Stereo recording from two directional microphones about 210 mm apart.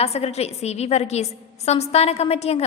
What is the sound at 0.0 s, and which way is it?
A woman's voice, 30° left (ahead or behind).